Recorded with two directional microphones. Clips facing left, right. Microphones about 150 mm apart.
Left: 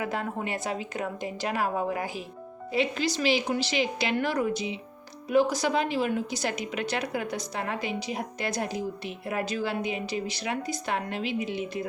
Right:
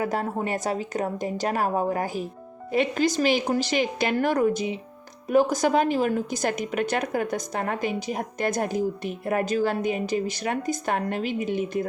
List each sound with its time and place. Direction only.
0.0 s a woman's voice: 40° right (ahead or behind)